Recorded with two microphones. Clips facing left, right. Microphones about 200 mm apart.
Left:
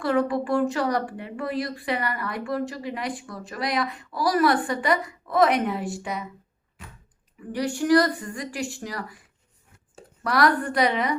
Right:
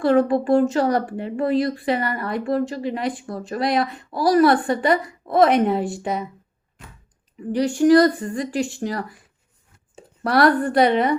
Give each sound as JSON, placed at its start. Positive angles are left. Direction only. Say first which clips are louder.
{"t": 0.0, "sound": "speech", "louder": "right 6 dB", "side_deg": -25}
{"t": 7.5, "sound": "speech", "louder": "right 6 dB", "side_deg": -25}
{"t": 10.2, "sound": "speech", "louder": "right 5 dB", "side_deg": -30}